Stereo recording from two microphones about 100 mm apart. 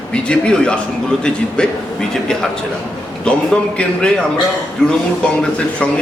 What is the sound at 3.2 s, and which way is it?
Speech, 10° left (ahead or behind).